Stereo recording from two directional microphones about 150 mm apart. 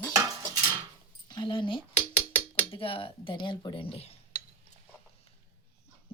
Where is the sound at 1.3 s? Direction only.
30° left (ahead or behind).